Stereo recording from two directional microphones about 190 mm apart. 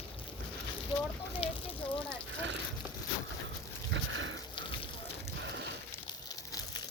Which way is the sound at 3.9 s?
90° right.